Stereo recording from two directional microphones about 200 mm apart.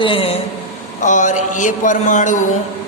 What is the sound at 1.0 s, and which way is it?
Speech, 40° left (ahead or behind).